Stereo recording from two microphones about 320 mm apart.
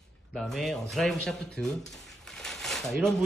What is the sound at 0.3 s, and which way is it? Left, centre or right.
Speech, centre.